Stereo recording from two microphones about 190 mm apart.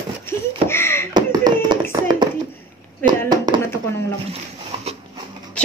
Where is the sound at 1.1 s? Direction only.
20° right (ahead or behind).